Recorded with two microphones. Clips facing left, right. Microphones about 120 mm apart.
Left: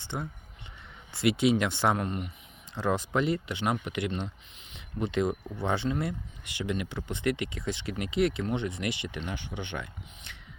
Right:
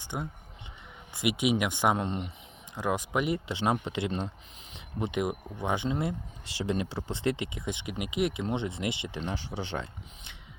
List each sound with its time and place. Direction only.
0.0 s speech: 15° right (ahead or behind)
2.0 s speech: 25° right (ahead or behind)
2.7 s speech: 15° right (ahead or behind); by 10.3 s 30° right (ahead or behind)